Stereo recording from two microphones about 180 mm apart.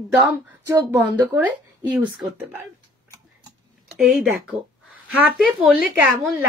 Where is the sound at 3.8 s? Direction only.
Centre (ahead or behind).